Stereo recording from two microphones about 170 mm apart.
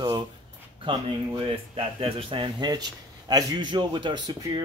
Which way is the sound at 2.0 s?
30° right (ahead or behind).